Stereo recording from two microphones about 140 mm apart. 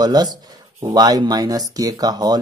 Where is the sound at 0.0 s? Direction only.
30° right (ahead or behind).